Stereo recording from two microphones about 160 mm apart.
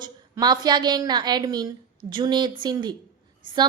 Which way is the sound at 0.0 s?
25° right (ahead or behind).